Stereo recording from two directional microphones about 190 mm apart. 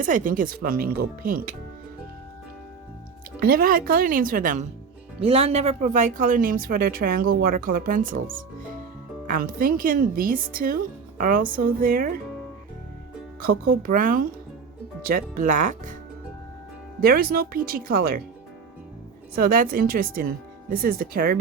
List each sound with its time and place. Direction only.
0.0 s speech: 45° right (ahead or behind)
3.4 s speech: 50° right (ahead or behind)
5.2 s speech: 30° right (ahead or behind); by 12.2 s 45° right (ahead or behind)
13.4 s speech: 50° right (ahead or behind)
17.0 s speech: 50° right (ahead or behind)
19.4 s speech: 50° right (ahead or behind)